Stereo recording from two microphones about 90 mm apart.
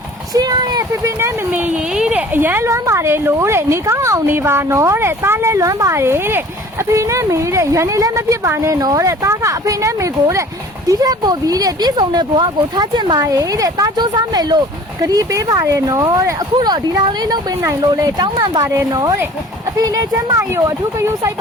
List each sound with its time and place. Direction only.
0.3 s speech: 45° right (ahead or behind)
1.2 s speech: 20° right (ahead or behind)
2.0 s a sound: 10° right (ahead or behind)
2.3 s a woman's voice: 20° right (ahead or behind)
8.8 s a woman's voice: 40° right (ahead or behind)
15.0 s a woman's voice: 40° right (ahead or behind)
16.6 s speech: 55° right (ahead or behind)
18.7 s a woman's voice: 40° right (ahead or behind)